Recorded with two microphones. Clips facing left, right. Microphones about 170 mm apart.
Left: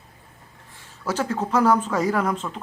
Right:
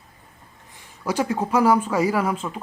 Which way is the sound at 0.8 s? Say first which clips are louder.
Right 2 dB; 15° right (ahead or behind).